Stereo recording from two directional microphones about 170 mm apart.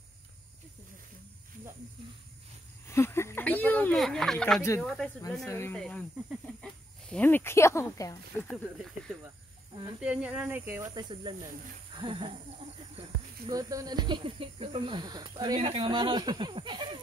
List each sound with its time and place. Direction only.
2.9 s speech: 15° left (ahead or behind)
4.6 s speech: 15° left (ahead or behind)
4.8 s speech: centre (ahead or behind)
5.5 s speech: 15° left (ahead or behind)
5.8 s speech: 5° left (ahead or behind)
8.5 s speech: centre (ahead or behind)
11.0 s speech: 25° right (ahead or behind)
13.5 s speech: 20° right (ahead or behind)